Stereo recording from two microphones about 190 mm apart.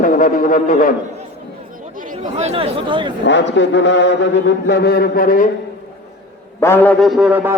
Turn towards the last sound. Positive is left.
turn(degrees=-5)  # may be behind; listen again after turning